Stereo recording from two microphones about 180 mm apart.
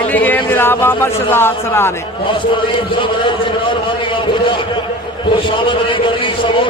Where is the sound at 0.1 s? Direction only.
10° left (ahead or behind).